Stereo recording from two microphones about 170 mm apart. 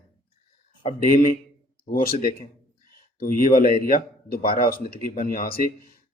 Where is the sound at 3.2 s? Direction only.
60° left (ahead or behind).